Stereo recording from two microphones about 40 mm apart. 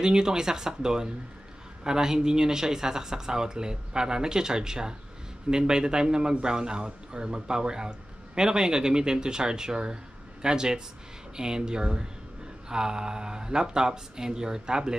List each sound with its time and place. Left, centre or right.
0.0 s speech: centre